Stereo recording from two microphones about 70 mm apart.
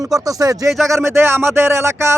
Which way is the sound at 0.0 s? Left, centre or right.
Right.